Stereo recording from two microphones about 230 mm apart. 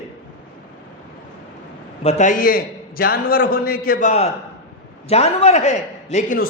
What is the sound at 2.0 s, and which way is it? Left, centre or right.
A man's voice, left.